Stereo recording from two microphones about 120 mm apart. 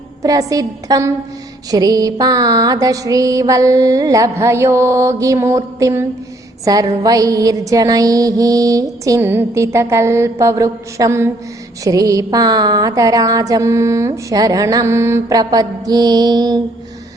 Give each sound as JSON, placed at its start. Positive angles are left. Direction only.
{"t": 0.2, "sound": "music", "side_deg": -30}
{"t": 15.4, "sound": "mantra", "side_deg": -35}